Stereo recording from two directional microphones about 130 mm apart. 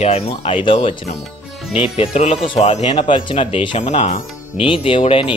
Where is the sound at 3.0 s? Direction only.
40° left (ahead or behind).